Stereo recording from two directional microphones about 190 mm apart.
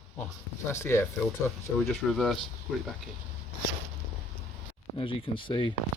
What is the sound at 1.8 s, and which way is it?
Speech, centre (ahead or behind).